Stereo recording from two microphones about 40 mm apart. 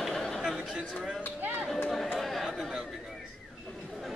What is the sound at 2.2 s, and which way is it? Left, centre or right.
Chatter, centre.